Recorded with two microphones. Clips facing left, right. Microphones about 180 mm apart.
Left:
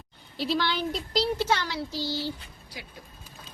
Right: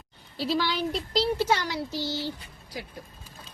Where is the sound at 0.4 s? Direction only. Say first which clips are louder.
Right 1 dB; 10° right (ahead or behind).